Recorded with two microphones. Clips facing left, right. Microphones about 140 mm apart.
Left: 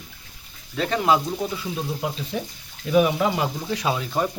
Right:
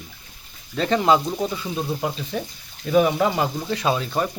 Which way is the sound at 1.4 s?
25° right (ahead or behind).